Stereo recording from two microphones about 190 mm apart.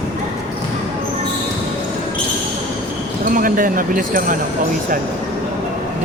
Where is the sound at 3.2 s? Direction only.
45° right (ahead or behind).